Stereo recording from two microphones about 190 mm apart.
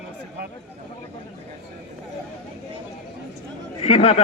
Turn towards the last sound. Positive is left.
turn(degrees=30)  # may be behind; listen again after turning